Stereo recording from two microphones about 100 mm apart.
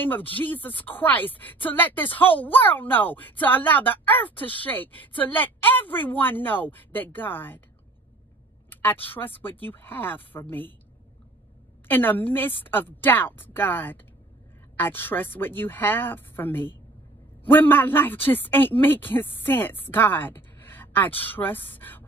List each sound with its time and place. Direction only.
0.0 s speech: 20° left (ahead or behind)
8.6 s speech: 20° left (ahead or behind)
11.9 s speech: 20° left (ahead or behind)